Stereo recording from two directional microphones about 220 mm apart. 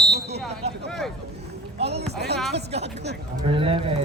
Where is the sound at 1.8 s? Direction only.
50° right (ahead or behind).